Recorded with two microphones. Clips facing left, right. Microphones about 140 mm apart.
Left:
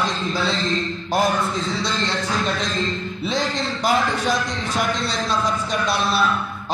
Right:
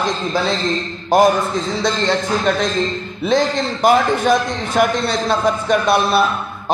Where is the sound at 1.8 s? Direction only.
50° right (ahead or behind).